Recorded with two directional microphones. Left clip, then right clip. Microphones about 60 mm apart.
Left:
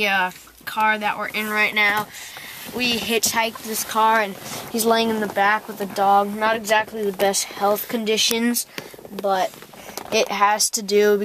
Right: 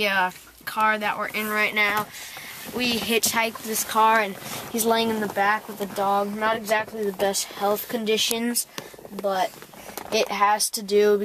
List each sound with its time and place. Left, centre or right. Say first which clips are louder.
0.0 s speech: left 2 dB; centre; by 6.0 s left
6.0 s speech: left 6 dB; left
6.7 s speech: left 4 dB; left
7.5 s speech: left 4 dB; left
9.2 s speech: left 3 dB; left